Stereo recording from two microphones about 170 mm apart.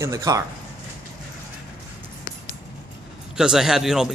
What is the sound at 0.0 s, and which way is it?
Speech, 20° right (ahead or behind).